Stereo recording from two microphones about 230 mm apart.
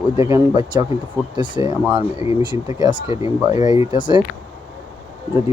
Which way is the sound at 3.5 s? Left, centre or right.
Centre.